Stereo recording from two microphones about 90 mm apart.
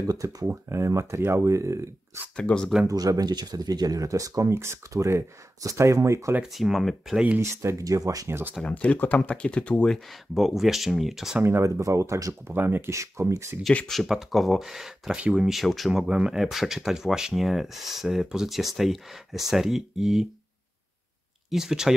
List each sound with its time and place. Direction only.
0.0 s speech: 40° right (ahead or behind)
0.5 s speech: 30° right (ahead or behind)
2.3 s speech: 10° left (ahead or behind)
2.9 s speech: 40° right (ahead or behind)
6.5 s speech: centre (ahead or behind)
7.3 s speech: 30° right (ahead or behind)
8.3 s speech: 25° right (ahead or behind)
8.6 s speech: 15° left (ahead or behind)
10.3 s speech: 5° right (ahead or behind)
11.4 s speech: 30° right (ahead or behind)
12.5 s speech: 25° right (ahead or behind)
13.8 s speech: centre (ahead or behind)
21.5 s speech: 5° right (ahead or behind)